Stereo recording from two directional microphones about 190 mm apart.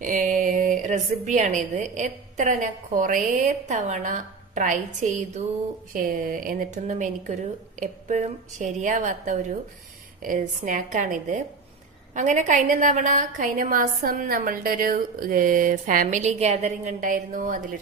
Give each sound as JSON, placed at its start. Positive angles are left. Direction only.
{"t": 0.0, "sound": "a woman's voice", "side_deg": -40}